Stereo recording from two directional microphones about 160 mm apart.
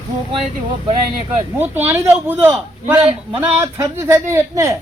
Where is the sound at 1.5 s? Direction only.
10° right (ahead or behind).